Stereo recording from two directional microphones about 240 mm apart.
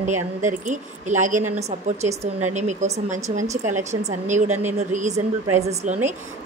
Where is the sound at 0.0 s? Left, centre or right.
Right.